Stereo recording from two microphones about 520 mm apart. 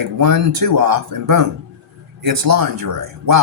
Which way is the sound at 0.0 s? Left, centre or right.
Right.